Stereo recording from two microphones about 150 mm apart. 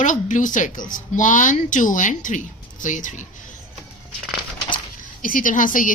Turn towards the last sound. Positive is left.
turn(degrees=65)  # may be behind; listen again after turning